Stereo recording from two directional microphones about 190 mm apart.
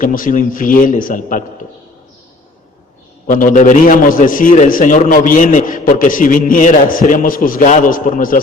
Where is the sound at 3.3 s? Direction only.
45° left (ahead or behind).